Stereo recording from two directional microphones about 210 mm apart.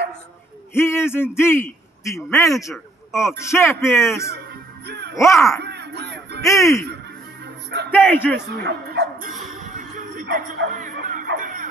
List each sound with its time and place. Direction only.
0.7 s a man's voice: 10° left (ahead or behind)
2.2 s a man's voice: centre (ahead or behind)
3.2 s a man's voice: 15° left (ahead or behind)
4.8 s music: 50° right (ahead or behind)
5.1 s a man's voice: 15° left (ahead or behind)
5.6 s music: 55° right (ahead or behind)
6.6 s a man's voice: 15° left (ahead or behind)
7.4 s music: 55° right (ahead or behind)
7.9 s a man's voice: 10° left (ahead or behind)
8.5 s speech: 50° right (ahead or behind)
9.3 s music: 40° right (ahead or behind)